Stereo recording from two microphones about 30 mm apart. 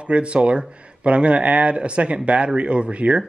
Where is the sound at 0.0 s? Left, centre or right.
Right.